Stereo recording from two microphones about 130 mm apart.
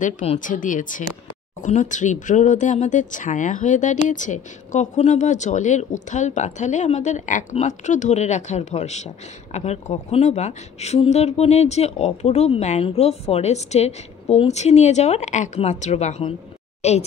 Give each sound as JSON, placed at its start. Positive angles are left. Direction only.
{"t": 0.0, "sound": "speech", "side_deg": 70}
{"t": 1.6, "sound": "a woman's voice", "side_deg": 70}